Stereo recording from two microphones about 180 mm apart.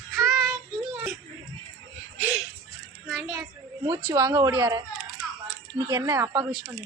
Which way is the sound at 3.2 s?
20° right (ahead or behind).